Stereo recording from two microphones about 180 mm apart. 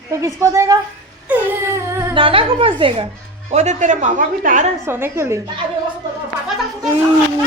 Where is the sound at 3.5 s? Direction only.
40° right (ahead or behind).